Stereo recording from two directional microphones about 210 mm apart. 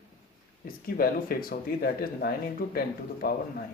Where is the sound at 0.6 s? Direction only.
45° left (ahead or behind).